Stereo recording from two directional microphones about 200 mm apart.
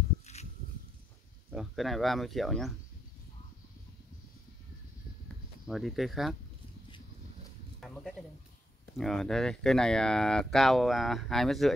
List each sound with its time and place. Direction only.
0.3 s a sound: 35° left (ahead or behind)
1.5 s speech: centre (ahead or behind)
5.7 s speech: centre (ahead or behind)
8.9 s speech: centre (ahead or behind)